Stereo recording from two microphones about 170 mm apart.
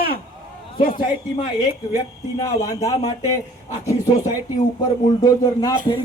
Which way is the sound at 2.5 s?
20° left (ahead or behind).